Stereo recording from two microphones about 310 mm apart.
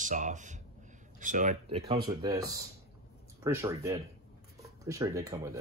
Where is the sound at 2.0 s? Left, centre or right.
Centre.